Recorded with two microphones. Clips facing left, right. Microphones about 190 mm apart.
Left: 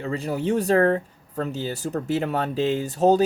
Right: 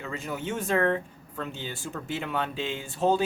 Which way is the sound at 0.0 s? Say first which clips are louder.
Left 8 dB; 35° left (ahead or behind).